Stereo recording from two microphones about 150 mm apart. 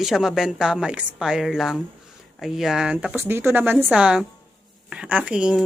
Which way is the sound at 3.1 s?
15° right (ahead or behind).